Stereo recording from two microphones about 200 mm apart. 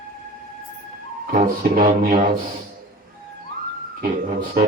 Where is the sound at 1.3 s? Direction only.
45° right (ahead or behind).